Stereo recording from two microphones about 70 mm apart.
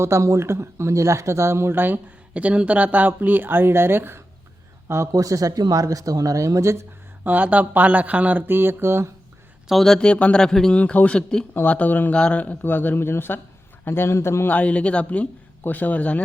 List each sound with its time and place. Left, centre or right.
0.0 s speech: right
5.1 s speech: right
7.3 s speech: right
9.6 s speech: centre
10.8 s speech: centre
11.5 s a man's voice: left
12.1 s a man's voice: centre; by 14.5 s left
14.5 s a man's voice: centre